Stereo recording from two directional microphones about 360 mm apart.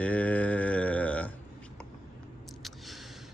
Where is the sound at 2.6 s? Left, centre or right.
Centre.